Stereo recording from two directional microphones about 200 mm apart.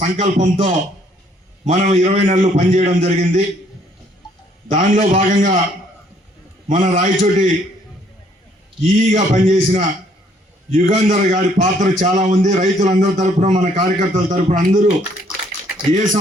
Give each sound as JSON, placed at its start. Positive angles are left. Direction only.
{"t": 0.0, "sound": "a man's voice", "side_deg": -35}
{"t": 4.7, "sound": "a man's voice", "side_deg": -40}
{"t": 6.7, "sound": "a man's voice", "side_deg": -45}
{"t": 8.8, "sound": "a man's voice", "side_deg": -35}
{"t": 15.9, "sound": "a man's voice", "side_deg": -40}